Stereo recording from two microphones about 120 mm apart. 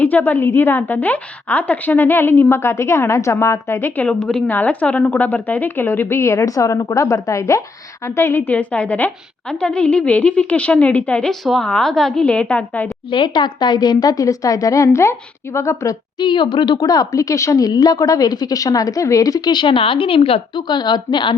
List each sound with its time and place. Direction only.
0.0 s a woman's voice: 15° left (ahead or behind)
13.1 s a woman's voice: 40° left (ahead or behind); by 16.0 s 25° left (ahead or behind)
16.1 s speech: 40° left (ahead or behind)